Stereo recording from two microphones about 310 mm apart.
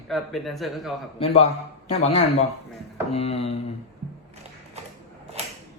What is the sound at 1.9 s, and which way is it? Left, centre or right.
Speech, centre.